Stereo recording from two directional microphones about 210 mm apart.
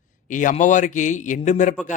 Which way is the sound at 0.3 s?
35° left (ahead or behind).